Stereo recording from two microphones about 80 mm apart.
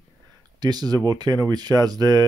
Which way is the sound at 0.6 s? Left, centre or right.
Right.